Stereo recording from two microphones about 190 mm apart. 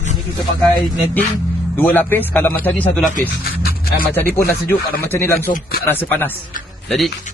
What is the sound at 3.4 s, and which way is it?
Music, 50° left (ahead or behind).